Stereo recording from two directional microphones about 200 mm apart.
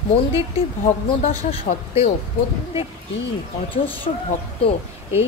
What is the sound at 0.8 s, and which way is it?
Speech, 40° left (ahead or behind).